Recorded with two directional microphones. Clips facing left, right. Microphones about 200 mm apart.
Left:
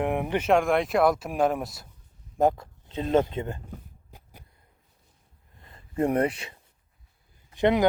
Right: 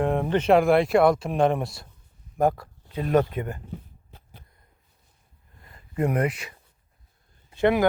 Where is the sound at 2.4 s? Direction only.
20° left (ahead or behind).